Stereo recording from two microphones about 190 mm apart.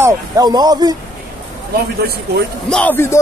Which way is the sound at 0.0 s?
20° right (ahead or behind).